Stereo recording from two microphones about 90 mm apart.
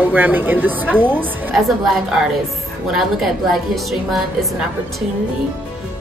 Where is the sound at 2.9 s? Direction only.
Centre (ahead or behind).